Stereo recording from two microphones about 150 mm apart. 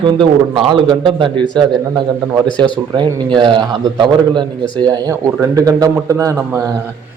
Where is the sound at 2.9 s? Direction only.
30° right (ahead or behind).